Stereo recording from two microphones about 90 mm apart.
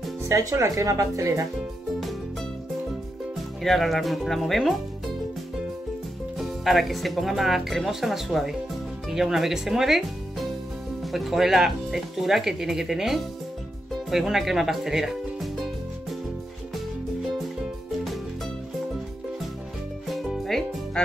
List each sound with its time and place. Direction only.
0.3 s speech: 35° right (ahead or behind)
3.6 s speech: centre (ahead or behind)
6.3 s speech: centre (ahead or behind)
14.1 s music: 5° right (ahead or behind)
20.1 s music: centre (ahead or behind)